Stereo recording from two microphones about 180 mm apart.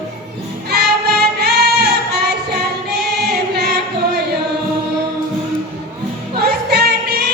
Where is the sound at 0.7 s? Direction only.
65° right (ahead or behind).